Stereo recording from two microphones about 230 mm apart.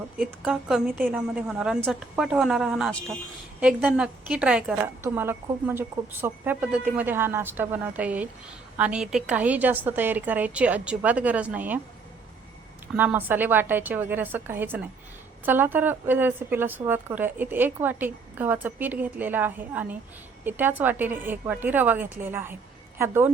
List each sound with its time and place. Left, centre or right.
0.3 s a woman's voice: centre
12.9 s a woman's voice: centre